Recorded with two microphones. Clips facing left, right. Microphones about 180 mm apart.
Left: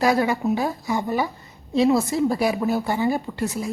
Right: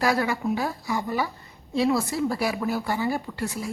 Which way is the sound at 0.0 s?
20° left (ahead or behind).